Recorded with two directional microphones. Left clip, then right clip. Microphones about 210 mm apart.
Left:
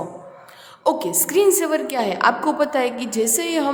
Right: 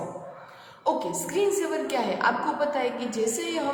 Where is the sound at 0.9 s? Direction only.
55° left (ahead or behind).